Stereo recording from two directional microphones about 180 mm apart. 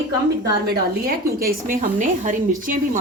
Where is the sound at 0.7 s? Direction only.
55° right (ahead or behind).